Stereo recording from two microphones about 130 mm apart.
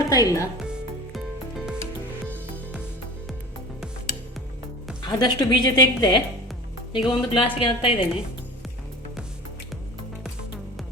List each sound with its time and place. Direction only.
0.1 s a woman's voice: 25° left (ahead or behind)
0.6 s music: 5° right (ahead or behind)
5.0 s a woman's voice: 35° left (ahead or behind)